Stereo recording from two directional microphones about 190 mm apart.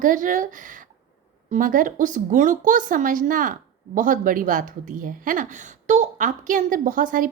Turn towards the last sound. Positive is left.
turn(degrees=-45)  # may be behind; listen again after turning